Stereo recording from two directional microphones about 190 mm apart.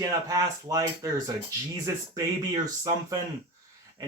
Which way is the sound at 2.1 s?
20° right (ahead or behind).